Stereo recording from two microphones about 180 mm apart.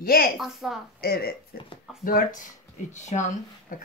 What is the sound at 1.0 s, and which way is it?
Speech, 55° left (ahead or behind).